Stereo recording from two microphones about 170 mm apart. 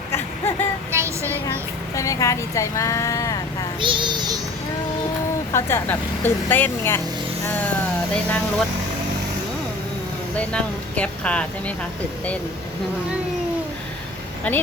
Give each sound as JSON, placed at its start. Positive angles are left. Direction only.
{"t": 0.9, "sound": "music", "side_deg": -15}
{"t": 2.0, "sound": "speech", "side_deg": 20}
{"t": 3.8, "sound": "child singing", "side_deg": -30}
{"t": 5.5, "sound": "speech", "side_deg": 15}
{"t": 8.1, "sound": "speech", "side_deg": 5}
{"t": 10.3, "sound": "speech", "side_deg": 5}
{"t": 14.5, "sound": "speech", "side_deg": 10}